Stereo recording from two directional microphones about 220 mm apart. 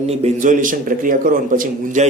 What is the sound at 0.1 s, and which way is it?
A man's voice, 35° right (ahead or behind).